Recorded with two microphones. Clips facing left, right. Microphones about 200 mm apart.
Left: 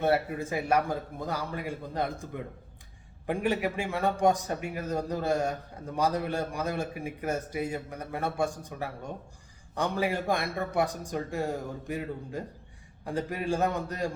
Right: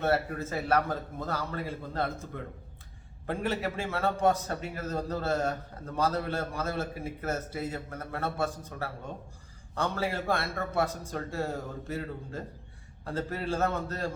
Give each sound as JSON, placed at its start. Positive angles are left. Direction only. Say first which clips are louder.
{"t": 0.0, "sound": "a man's voice", "louder": "left 2 dB", "side_deg": 15}